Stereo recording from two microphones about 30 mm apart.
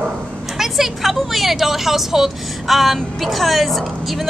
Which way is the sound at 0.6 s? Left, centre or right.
Centre.